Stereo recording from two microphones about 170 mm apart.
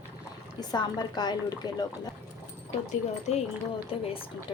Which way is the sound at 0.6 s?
25° left (ahead or behind).